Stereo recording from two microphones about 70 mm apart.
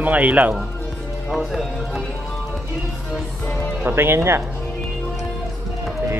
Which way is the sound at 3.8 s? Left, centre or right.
Right.